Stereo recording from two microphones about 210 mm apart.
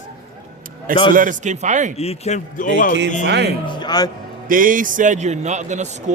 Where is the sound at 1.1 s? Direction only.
40° right (ahead or behind).